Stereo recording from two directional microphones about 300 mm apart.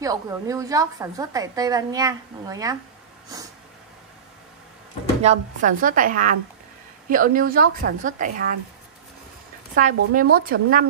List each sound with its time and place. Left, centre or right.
0.0 s a woman's voice: centre
5.2 s a woman's voice: right
9.8 s a woman's voice: right